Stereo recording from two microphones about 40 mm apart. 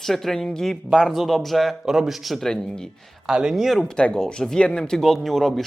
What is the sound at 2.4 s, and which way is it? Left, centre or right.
Speech, centre.